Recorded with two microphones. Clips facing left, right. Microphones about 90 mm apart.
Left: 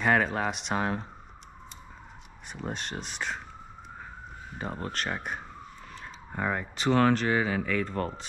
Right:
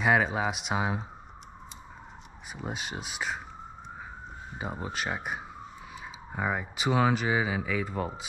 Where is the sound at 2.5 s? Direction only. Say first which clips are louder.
Left 1 dB; 5° right (ahead or behind).